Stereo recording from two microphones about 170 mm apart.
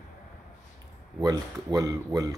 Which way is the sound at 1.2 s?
20° right (ahead or behind).